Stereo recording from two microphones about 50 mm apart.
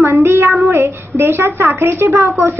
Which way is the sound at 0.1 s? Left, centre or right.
Right.